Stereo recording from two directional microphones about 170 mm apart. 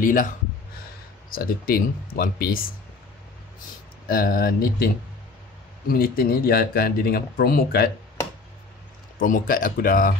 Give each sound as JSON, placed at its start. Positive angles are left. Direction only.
{"t": 0.0, "sound": "speech", "side_deg": 55}
{"t": 1.3, "sound": "speech", "side_deg": 60}
{"t": 4.1, "sound": "speech", "side_deg": 60}
{"t": 9.2, "sound": "speech", "side_deg": 55}